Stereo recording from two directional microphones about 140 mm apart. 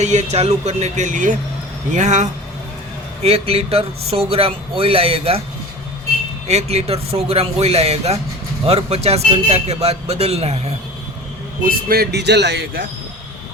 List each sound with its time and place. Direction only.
0.0 s speech: 55° right (ahead or behind)
3.2 s speech: 45° right (ahead or behind)
6.5 s speech: 50° right (ahead or behind)
11.6 s speech: 90° right